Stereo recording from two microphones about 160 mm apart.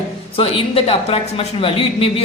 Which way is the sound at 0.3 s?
35° left (ahead or behind).